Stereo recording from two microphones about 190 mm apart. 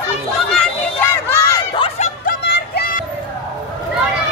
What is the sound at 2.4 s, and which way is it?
Music, 60° left (ahead or behind).